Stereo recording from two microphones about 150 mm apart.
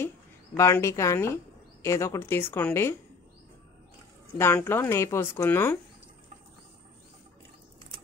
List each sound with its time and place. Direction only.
0.6 s speech: 20° left (ahead or behind)
4.4 s speech: 15° left (ahead or behind)